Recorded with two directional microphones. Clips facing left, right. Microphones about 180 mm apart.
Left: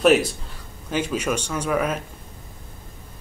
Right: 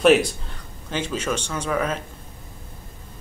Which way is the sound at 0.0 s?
Centre (ahead or behind).